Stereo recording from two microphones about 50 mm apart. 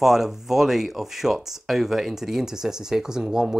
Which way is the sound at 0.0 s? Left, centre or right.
Centre.